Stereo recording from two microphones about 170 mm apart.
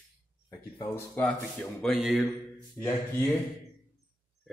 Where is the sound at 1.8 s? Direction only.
Centre (ahead or behind).